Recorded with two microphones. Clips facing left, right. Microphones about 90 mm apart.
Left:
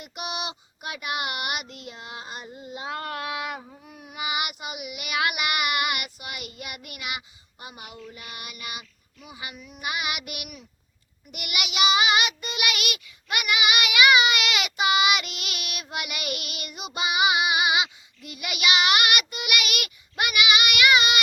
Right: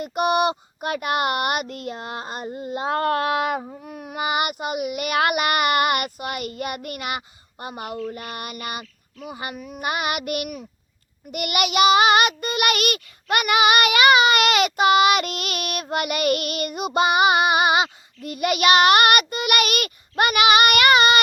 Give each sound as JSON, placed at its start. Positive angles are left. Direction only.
{"t": 0.0, "sound": "child singing", "side_deg": -45}